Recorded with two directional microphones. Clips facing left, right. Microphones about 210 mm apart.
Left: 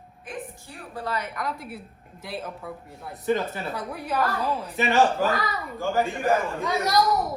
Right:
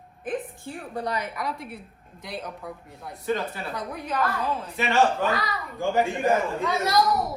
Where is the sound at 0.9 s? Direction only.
15° right (ahead or behind).